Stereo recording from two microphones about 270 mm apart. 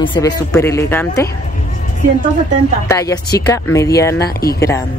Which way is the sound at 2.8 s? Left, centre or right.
Centre.